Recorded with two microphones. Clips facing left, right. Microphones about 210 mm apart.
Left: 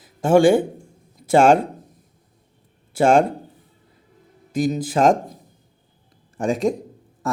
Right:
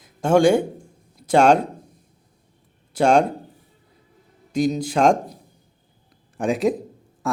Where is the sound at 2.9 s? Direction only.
5° left (ahead or behind).